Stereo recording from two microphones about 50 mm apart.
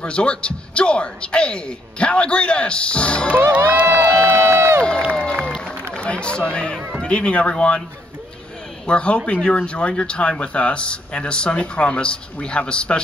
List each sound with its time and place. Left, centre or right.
0.0 s a man's voice: left
3.5 s crowd: right
4.2 s crowd: right
5.1 s a sound: centre
5.9 s a man's voice: left
8.8 s a man's voice: left